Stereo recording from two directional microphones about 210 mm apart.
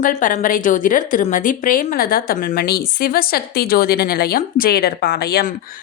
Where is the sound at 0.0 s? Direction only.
40° left (ahead or behind).